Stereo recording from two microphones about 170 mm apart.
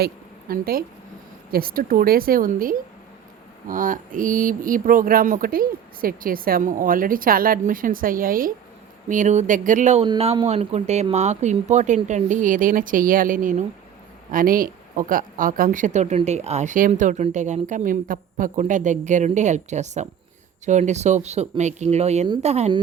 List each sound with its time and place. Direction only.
0.0 s a woman's voice: 60° right (ahead or behind); by 10.1 s 45° right (ahead or behind)
10.1 s speech: 30° right (ahead or behind)